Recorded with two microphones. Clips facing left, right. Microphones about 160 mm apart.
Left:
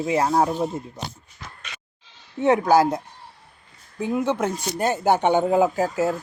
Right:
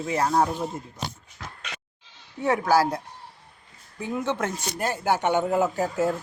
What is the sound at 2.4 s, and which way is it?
Speech, 20° left (ahead or behind).